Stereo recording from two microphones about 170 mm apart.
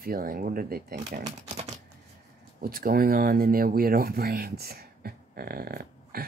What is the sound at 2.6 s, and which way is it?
Speech, 60° right (ahead or behind).